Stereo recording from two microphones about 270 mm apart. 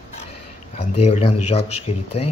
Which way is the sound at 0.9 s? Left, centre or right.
Left.